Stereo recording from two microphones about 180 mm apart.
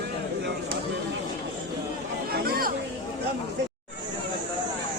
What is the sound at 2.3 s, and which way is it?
Chatter, 55° right (ahead or behind).